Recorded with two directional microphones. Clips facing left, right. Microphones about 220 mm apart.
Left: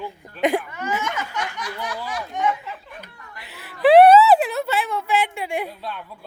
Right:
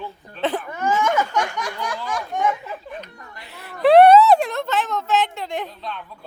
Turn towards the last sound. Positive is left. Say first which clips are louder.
# even
turn(degrees=10)  # may be behind; listen again after turning